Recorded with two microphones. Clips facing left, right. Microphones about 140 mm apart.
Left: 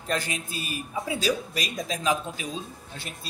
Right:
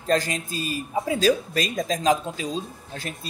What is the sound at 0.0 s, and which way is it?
A man's voice, 40° right (ahead or behind).